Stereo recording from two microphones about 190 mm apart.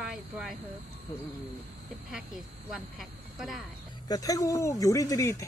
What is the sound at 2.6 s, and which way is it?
Speech, centre (ahead or behind).